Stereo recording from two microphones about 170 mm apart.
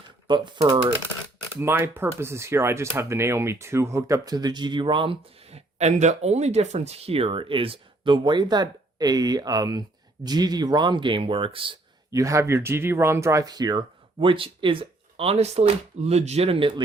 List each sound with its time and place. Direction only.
0.3 s speech: 25° right (ahead or behind)
1.5 s speech: 10° right (ahead or behind); by 11.8 s 30° right (ahead or behind)
12.1 s speech: 20° right (ahead or behind)